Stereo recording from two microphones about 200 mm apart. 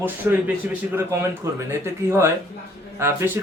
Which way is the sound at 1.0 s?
10° right (ahead or behind).